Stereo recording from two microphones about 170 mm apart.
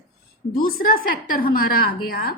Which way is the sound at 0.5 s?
55° left (ahead or behind).